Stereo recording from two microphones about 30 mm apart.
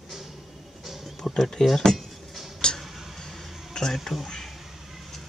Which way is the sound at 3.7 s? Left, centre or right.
Left.